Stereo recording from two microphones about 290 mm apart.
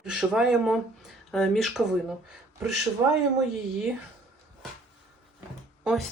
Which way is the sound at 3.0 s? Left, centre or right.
Centre.